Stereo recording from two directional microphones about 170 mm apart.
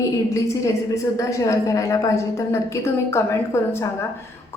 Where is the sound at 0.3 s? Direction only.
20° left (ahead or behind).